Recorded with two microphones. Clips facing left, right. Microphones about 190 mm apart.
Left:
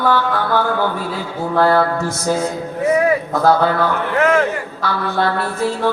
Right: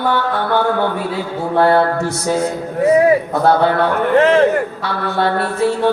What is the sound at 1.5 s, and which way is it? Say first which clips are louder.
Speech: right 2 dB; 25° right (ahead or behind).